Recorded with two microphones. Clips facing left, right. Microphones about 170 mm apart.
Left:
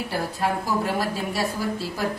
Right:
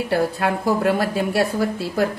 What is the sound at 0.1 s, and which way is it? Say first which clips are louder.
A woman's voice: right 6 dB; 60° right (ahead or behind).